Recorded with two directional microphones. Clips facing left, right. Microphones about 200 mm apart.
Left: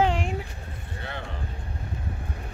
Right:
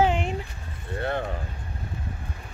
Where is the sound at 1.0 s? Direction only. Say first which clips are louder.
Right 10 dB; 50° right (ahead or behind).